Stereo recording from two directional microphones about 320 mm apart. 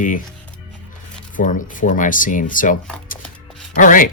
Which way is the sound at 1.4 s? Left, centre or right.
Left.